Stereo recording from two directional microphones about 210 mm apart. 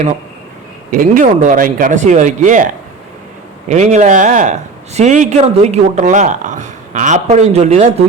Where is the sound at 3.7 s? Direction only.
35° right (ahead or behind).